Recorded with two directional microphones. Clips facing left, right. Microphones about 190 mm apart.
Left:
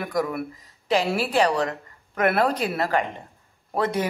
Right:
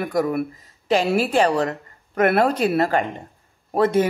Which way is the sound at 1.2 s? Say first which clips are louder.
Right 3 dB; 50° right (ahead or behind).